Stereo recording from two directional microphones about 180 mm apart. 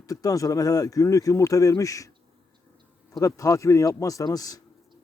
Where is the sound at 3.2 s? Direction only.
20° left (ahead or behind).